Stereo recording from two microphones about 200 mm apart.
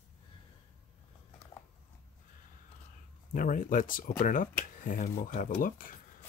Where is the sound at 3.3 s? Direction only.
40° left (ahead or behind).